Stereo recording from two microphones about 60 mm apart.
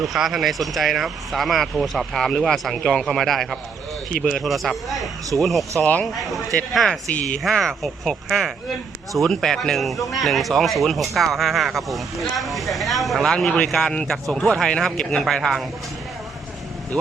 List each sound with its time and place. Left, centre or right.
0.0 s speech: centre
5.8 s speech: left
6.1 s speech: centre
7.1 s speech: left
7.5 s a man's voice: centre